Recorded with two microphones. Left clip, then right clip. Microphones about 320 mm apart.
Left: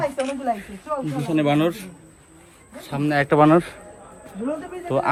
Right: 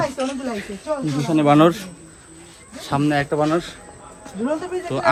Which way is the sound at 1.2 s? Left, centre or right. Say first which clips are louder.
Right 6 dB; centre.